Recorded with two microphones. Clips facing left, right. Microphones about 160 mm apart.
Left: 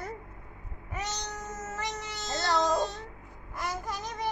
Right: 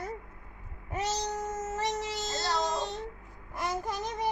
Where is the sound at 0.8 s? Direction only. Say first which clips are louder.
Right 5 dB; 30° right (ahead or behind).